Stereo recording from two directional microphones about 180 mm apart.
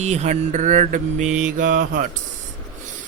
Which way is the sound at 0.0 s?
40° right (ahead or behind).